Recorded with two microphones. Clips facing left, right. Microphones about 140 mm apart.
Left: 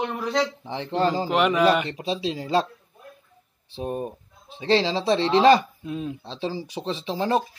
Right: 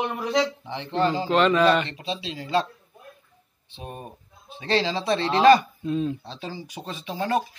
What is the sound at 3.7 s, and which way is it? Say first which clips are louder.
Speech: left 9 dB; 35° left (ahead or behind).